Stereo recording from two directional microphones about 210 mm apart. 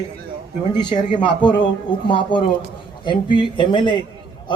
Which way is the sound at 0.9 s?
20° left (ahead or behind).